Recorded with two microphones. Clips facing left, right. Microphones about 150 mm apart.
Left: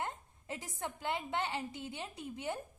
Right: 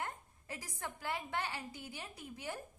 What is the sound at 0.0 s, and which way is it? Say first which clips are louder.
A woman's voice: left 3 dB; 25° left (ahead or behind).